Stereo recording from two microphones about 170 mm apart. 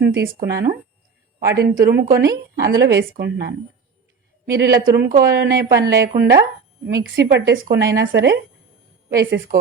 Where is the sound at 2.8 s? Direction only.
85° right.